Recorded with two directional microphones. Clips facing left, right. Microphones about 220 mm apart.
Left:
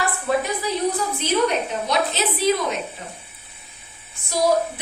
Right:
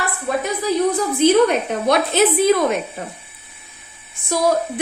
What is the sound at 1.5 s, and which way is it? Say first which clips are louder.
Speech: right 5 dB; 55° right (ahead or behind).